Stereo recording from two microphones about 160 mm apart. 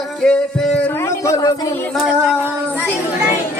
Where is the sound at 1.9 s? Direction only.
Centre (ahead or behind).